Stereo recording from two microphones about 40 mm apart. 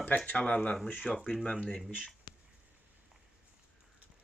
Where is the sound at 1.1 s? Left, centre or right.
Centre.